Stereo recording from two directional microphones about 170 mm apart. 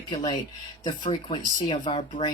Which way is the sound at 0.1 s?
25° left (ahead or behind).